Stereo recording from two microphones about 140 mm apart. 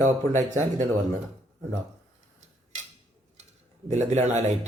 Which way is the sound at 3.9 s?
55° right (ahead or behind).